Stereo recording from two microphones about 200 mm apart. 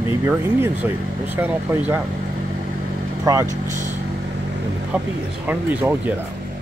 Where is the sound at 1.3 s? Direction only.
10° right (ahead or behind).